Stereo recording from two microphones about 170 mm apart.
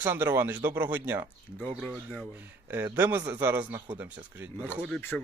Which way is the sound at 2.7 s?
15° right (ahead or behind).